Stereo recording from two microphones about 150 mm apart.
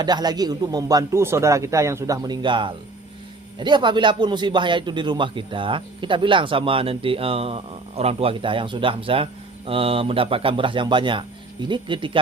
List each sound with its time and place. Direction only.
0.0 s a man's voice: 25° right (ahead or behind)